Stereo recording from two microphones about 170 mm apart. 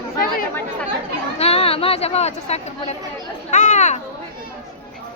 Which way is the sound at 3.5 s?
45° left (ahead or behind).